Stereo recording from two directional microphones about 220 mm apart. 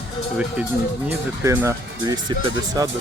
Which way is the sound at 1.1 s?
10° right (ahead or behind).